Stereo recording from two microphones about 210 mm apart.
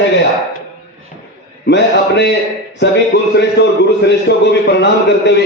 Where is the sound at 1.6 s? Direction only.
55° left (ahead or behind).